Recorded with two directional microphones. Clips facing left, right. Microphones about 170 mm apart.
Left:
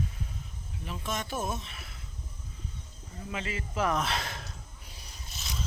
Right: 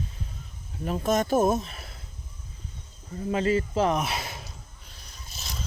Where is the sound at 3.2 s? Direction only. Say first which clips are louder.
Right 12 dB; 40° right (ahead or behind).